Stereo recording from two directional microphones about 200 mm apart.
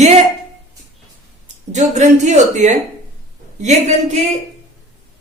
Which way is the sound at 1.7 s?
35° right (ahead or behind).